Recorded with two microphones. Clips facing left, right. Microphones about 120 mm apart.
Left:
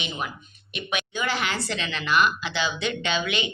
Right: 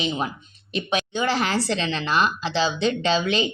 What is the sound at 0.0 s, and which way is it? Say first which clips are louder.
Speech: right 6 dB; 30° right (ahead or behind).